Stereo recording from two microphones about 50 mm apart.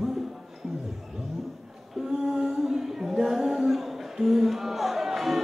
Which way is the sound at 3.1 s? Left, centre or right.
Centre.